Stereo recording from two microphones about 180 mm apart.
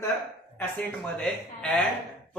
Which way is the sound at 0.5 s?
10° left (ahead or behind).